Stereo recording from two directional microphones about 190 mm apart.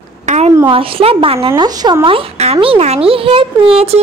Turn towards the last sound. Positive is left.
turn(degrees=-30)  # may be behind; listen again after turning